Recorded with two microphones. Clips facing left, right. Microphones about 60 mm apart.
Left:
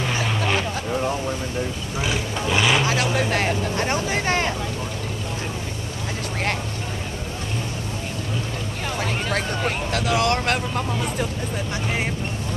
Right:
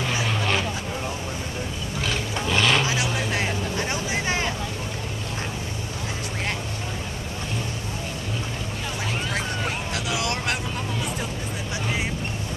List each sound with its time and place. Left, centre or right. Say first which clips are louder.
0.3 s vehicle: left 1 dB; centre
2.0 s vehicle: left 2 dB; centre
2.8 s vehicle: left 4 dB; left
9.3 s vehicle: left 3 dB; left